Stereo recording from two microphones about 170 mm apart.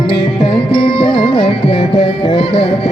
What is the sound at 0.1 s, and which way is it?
Music, 30° left (ahead or behind).